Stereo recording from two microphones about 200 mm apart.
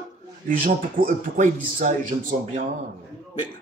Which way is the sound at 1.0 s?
45° right (ahead or behind).